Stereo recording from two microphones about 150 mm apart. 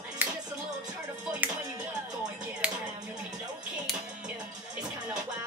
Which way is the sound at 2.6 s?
5° right (ahead or behind).